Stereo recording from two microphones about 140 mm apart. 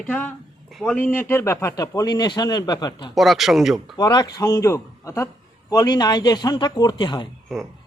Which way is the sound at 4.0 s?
30° left (ahead or behind).